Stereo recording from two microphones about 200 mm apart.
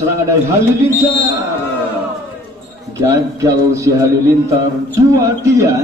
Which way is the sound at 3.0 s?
15° right (ahead or behind).